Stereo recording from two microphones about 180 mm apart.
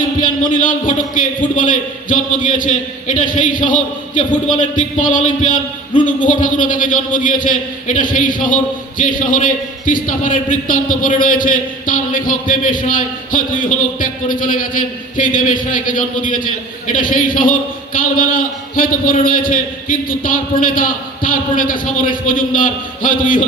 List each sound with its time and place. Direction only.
0.2 s a man's voice: 50° left (ahead or behind)